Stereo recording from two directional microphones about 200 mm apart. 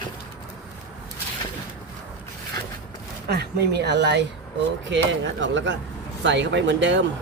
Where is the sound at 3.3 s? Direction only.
55° right (ahead or behind).